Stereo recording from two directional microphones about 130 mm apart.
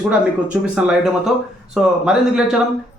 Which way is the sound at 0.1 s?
10° right (ahead or behind).